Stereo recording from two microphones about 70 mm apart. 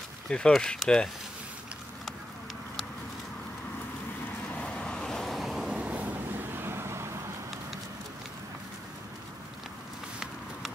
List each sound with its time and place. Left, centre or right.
0.3 s speech: centre
4.5 s vehicle: centre
5.7 s waves: centre
6.1 s vehicle: right